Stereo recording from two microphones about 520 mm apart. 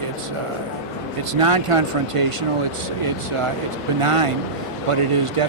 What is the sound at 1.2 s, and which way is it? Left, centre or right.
Speech, right.